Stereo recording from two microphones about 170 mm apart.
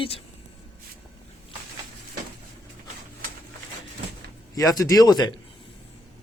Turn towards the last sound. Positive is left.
turn(degrees=25)  # may be behind; listen again after turning